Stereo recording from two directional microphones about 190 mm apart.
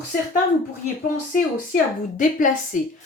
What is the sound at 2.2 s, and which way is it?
Speech, 45° left (ahead or behind).